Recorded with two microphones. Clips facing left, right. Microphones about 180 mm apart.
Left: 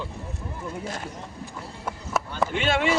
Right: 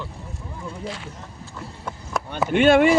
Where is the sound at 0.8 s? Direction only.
45° left (ahead or behind).